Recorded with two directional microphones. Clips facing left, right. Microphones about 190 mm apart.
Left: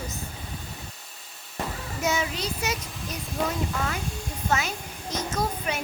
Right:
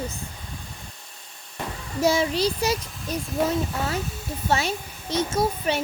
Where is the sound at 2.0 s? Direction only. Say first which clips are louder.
Right 7 dB; 35° right (ahead or behind).